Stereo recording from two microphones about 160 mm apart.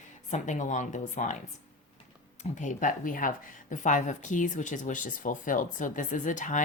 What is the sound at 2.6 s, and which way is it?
A woman's voice, 50° left (ahead or behind).